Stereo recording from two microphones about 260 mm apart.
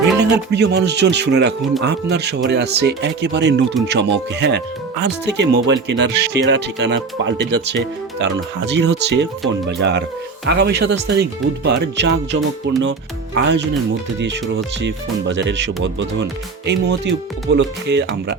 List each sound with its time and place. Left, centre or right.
0.2 s speech: right
14.8 s speech: right